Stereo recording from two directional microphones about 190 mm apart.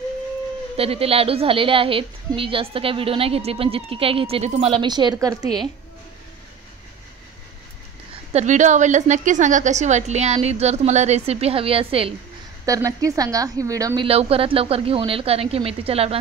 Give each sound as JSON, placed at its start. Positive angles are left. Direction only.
{"t": 0.7, "sound": "a woman's voice", "side_deg": -30}
{"t": 8.3, "sound": "a woman's voice", "side_deg": -35}
{"t": 12.6, "sound": "a woman's voice", "side_deg": -15}
{"t": 14.0, "sound": "a woman's voice", "side_deg": -30}